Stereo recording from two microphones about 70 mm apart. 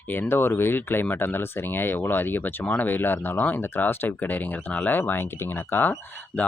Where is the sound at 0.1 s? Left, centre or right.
Left.